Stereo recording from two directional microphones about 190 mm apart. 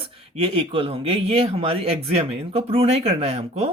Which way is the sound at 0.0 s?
30° right (ahead or behind).